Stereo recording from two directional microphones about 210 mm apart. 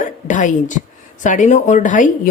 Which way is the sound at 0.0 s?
35° left (ahead or behind).